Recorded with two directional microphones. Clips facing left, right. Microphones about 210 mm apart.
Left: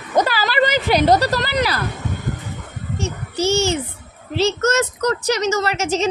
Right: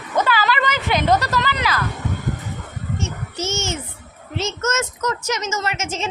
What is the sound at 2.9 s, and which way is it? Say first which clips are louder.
A child's voice: left 4 dB; 35° left (ahead or behind).